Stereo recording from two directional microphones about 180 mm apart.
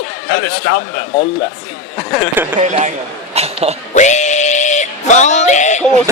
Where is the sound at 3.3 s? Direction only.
35° right (ahead or behind).